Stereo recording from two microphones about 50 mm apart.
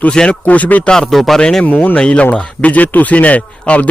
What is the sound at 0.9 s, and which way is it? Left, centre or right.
Speech, centre.